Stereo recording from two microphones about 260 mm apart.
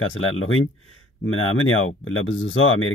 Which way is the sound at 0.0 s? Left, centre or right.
Left.